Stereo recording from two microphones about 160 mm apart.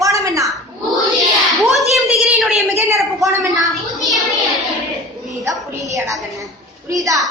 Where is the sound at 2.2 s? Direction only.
5° right (ahead or behind).